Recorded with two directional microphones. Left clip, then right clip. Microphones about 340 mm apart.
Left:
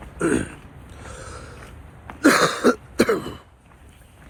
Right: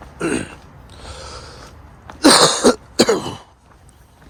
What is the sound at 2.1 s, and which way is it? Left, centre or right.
Cough, centre.